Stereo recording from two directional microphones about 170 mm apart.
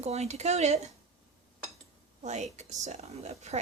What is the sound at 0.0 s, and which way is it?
Speech, 40° right (ahead or behind).